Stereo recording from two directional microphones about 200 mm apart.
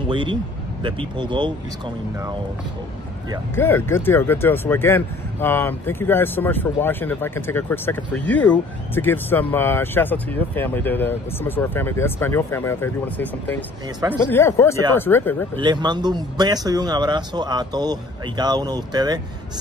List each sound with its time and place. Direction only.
0.1 s speech: 25° right (ahead or behind)
3.5 s speech: 10° left (ahead or behind)
15.6 s speech: 20° right (ahead or behind)